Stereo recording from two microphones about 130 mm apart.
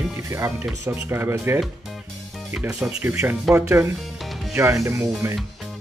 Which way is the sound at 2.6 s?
10° right (ahead or behind).